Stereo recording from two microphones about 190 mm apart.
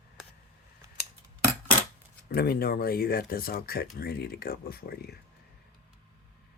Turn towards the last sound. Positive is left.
turn(degrees=55)  # may be behind; listen again after turning